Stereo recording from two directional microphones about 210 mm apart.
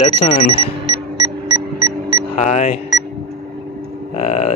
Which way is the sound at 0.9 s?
20° right (ahead or behind).